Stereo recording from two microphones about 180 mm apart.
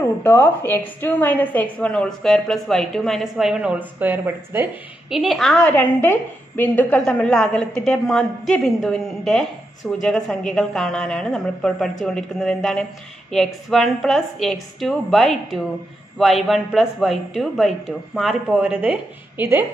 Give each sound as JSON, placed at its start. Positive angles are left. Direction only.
{"t": 0.2, "sound": "a woman's voice", "side_deg": 10}
{"t": 5.1, "sound": "a woman's voice", "side_deg": 0}